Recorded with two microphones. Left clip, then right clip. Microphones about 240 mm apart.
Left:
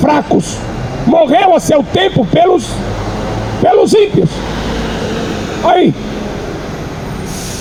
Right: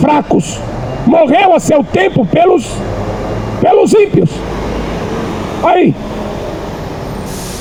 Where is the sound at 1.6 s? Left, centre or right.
Right.